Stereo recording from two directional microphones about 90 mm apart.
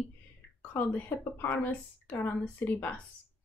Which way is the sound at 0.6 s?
20° left (ahead or behind).